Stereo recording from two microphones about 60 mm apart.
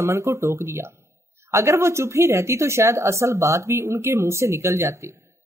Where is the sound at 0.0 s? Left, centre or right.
Right.